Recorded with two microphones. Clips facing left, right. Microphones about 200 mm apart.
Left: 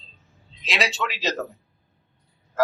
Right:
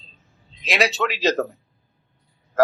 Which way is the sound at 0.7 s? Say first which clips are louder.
Right 5 dB; 55° right (ahead or behind).